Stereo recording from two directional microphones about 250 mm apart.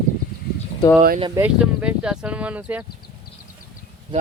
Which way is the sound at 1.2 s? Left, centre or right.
Centre.